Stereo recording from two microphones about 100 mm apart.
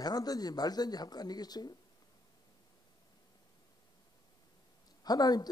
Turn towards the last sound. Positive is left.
turn(degrees=40)  # may be behind; listen again after turning